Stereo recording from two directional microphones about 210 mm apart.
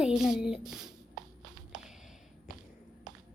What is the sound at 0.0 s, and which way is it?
Speech, 5° right (ahead or behind).